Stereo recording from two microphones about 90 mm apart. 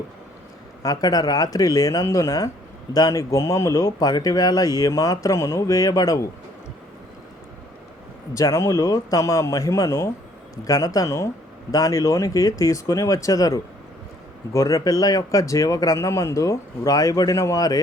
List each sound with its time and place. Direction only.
0.8 s speech: 45° left (ahead or behind)
8.3 s speech: 35° left (ahead or behind)